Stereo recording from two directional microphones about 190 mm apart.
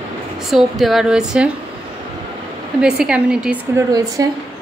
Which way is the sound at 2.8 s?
5° right (ahead or behind).